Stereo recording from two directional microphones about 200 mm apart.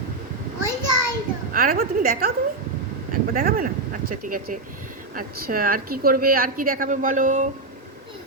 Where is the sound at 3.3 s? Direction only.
45° right (ahead or behind).